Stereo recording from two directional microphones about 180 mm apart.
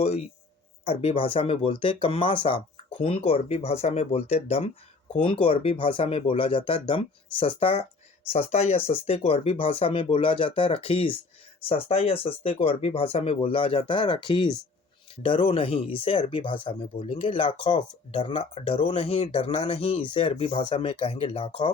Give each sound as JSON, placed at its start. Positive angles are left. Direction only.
{"t": 0.0, "sound": "speech", "side_deg": 35}